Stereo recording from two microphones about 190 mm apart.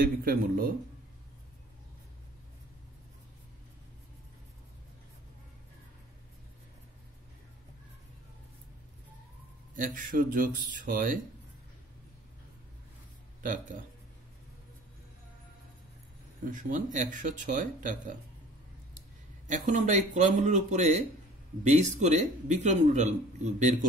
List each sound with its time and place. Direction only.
0.0 s speech: 50° right (ahead or behind)
9.8 s speech: 45° right (ahead or behind)
13.4 s speech: 45° right (ahead or behind)
16.4 s speech: 45° right (ahead or behind)
19.4 s a man's voice: 40° right (ahead or behind)